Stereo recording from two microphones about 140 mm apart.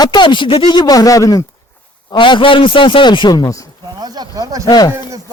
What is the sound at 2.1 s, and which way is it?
A man's voice, 35° left (ahead or behind).